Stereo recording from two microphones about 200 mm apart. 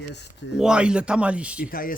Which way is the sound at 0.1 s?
60° left (ahead or behind).